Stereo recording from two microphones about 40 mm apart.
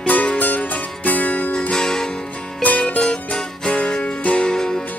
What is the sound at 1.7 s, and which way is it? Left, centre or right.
Music, centre.